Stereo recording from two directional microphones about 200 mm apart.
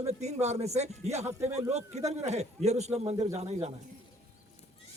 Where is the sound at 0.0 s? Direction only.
35° right (ahead or behind).